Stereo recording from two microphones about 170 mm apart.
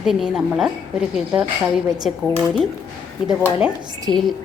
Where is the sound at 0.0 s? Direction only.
Centre (ahead or behind).